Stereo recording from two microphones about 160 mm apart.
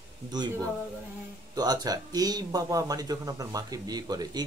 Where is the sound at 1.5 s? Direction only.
25° right (ahead or behind).